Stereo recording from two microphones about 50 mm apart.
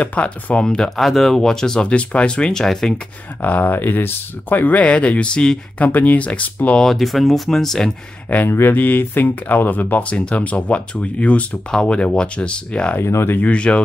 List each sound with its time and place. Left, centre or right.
0.0 s speech: left
0.8 s speech: centre
3.4 s speech: left
4.8 s speech: left
5.8 s speech: left
6.8 s speech: centre
8.5 s speech: left
8.7 s speech: left
10.0 s speech: left
13.0 s speech: left
13.5 s speech: left